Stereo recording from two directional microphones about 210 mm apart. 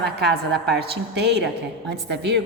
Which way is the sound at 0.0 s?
50° right (ahead or behind).